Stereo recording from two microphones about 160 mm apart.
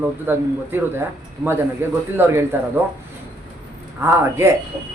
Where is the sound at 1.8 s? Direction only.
15° right (ahead or behind).